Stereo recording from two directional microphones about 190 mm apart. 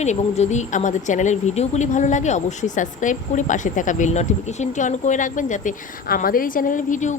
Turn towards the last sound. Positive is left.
turn(degrees=40)  # may be behind; listen again after turning